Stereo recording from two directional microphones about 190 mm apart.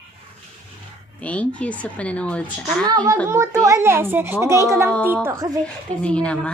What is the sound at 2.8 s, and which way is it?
A child's voice, 20° right (ahead or behind).